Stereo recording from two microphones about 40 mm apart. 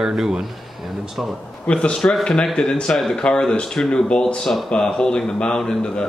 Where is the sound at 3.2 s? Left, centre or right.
Left.